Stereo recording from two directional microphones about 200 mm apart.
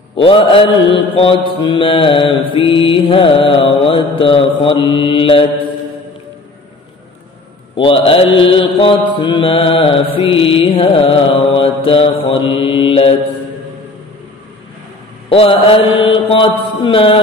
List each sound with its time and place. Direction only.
0.1 s mantra: 25° left (ahead or behind)
7.7 s mantra: 25° left (ahead or behind)
15.2 s mantra: 25° left (ahead or behind)